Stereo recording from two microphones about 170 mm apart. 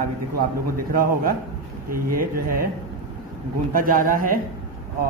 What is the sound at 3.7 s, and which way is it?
Speech, 55° right (ahead or behind).